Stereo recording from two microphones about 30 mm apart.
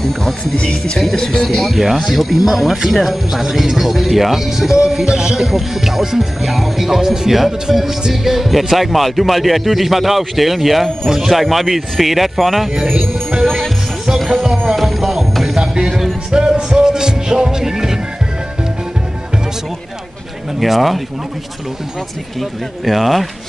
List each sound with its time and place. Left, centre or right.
0.6 s speech: left
1.5 s speech: centre
4.7 s speech: right
5.4 s speech: centre
11.4 s speech: centre
14.1 s music: centre
16.3 s music: right
20.5 s speech: centre
22.4 s speech: centre